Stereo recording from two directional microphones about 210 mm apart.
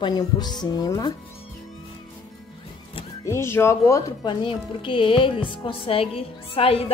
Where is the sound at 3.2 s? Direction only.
15° left (ahead or behind).